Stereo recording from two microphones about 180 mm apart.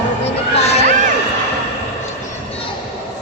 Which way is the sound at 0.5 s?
35° left (ahead or behind).